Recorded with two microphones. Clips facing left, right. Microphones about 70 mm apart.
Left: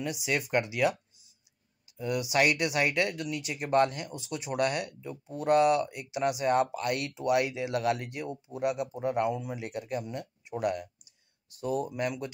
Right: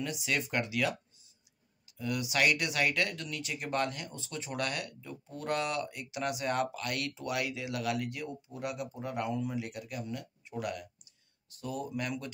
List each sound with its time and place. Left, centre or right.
0.0 s speech: centre
2.0 s speech: left